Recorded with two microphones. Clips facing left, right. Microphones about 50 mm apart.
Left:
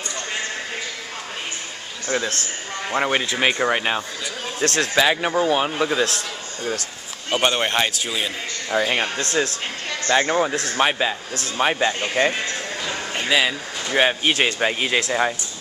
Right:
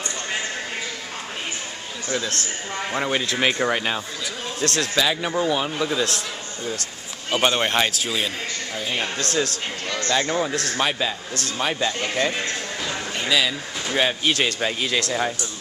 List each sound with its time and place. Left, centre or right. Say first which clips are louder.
2.0 s a man's voice: left 3 dB; left
4.6 s speech: left 3 dB; left
7.2 s a man's voice: even; centre
8.9 s speech: left 2 dB; left